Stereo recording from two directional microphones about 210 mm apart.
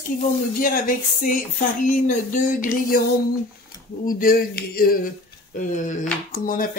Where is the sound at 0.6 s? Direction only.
40° left (ahead or behind).